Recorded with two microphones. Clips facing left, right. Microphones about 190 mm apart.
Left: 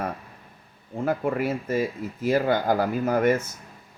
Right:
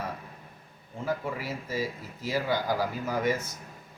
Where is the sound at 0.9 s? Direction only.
55° left (ahead or behind).